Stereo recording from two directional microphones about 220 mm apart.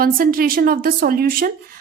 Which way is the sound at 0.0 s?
40° right (ahead or behind).